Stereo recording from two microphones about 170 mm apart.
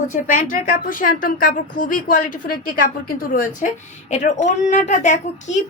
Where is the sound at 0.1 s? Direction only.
50° left (ahead or behind).